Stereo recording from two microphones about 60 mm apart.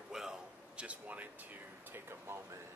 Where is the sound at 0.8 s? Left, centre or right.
Right.